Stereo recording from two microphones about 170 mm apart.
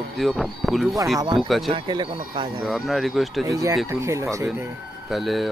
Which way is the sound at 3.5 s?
20° right (ahead or behind).